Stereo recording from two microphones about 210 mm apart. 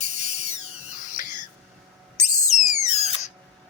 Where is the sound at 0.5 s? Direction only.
40° right (ahead or behind).